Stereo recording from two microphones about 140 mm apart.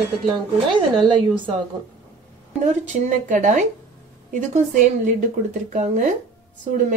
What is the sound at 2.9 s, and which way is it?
A woman's voice, 60° right (ahead or behind).